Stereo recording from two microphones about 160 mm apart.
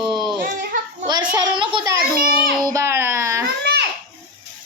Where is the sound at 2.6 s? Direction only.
15° right (ahead or behind).